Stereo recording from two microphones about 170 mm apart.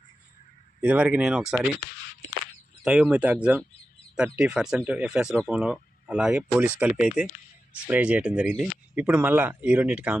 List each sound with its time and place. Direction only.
0.8 s speech: 10° right (ahead or behind)
2.8 s speech: 5° right (ahead or behind)